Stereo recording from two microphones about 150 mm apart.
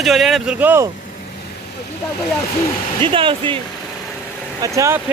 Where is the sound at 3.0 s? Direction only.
35° right (ahead or behind).